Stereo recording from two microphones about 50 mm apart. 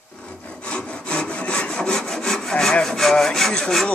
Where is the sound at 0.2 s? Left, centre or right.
Centre.